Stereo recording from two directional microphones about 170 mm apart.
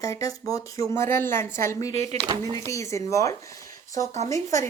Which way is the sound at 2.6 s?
20° left (ahead or behind).